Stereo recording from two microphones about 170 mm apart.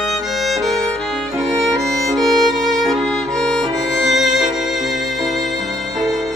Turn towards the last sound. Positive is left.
turn(degrees=0)  # may be behind; listen again after turning